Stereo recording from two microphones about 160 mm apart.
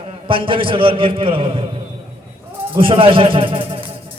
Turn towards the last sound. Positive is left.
turn(degrees=-35)  # may be behind; listen again after turning